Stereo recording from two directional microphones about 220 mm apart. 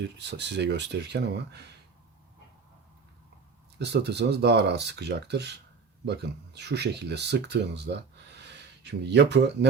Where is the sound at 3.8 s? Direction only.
50° right (ahead or behind).